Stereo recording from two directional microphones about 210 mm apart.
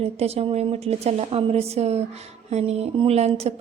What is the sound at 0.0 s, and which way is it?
A woman's voice, 30° right (ahead or behind).